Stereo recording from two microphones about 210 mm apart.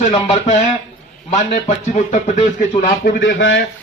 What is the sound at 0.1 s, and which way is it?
Speech, 30° left (ahead or behind).